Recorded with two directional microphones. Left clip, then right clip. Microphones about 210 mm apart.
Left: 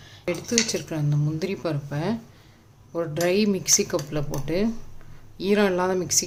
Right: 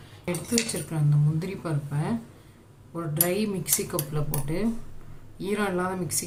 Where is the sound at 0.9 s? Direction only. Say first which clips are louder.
Left 1 dB; 50° left (ahead or behind).